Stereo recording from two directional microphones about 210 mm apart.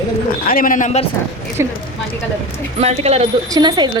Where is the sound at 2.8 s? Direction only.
30° right (ahead or behind).